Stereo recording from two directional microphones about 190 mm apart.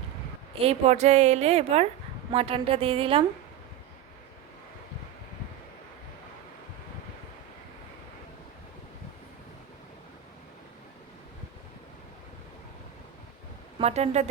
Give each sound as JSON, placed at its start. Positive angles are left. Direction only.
{"t": 0.6, "sound": "a woman's voice", "side_deg": -35}
{"t": 13.7, "sound": "a woman's voice", "side_deg": -35}